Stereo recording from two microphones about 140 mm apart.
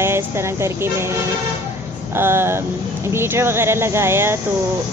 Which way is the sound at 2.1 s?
15° right (ahead or behind).